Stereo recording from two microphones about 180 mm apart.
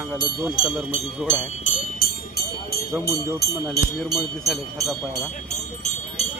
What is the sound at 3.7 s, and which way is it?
Speech, centre (ahead or behind).